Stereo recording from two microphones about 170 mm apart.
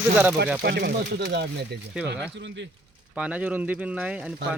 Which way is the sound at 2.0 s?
85° right.